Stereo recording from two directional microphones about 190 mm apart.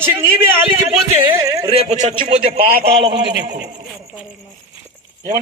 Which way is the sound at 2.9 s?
25° right (ahead or behind).